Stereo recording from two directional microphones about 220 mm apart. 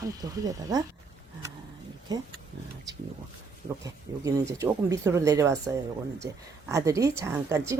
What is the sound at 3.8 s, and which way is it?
Speech, 15° right (ahead or behind).